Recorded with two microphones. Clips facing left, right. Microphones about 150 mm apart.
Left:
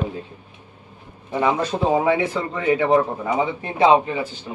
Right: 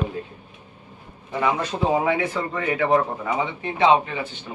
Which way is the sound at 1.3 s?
25° left (ahead or behind).